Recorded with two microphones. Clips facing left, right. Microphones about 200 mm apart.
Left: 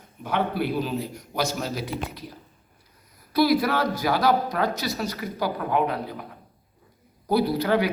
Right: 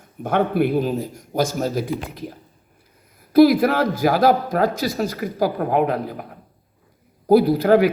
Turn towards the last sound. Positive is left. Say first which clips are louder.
# right 7 dB
turn(degrees=-50)  # may be behind; listen again after turning